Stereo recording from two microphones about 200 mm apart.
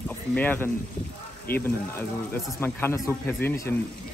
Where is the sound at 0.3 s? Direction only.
10° left (ahead or behind).